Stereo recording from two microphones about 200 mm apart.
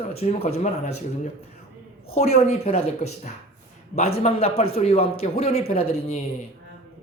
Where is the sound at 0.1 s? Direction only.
30° left (ahead or behind).